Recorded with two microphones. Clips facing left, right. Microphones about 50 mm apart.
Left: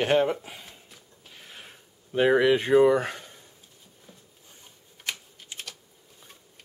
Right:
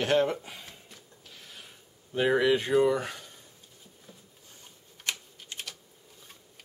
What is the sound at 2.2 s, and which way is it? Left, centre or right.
Speech, left.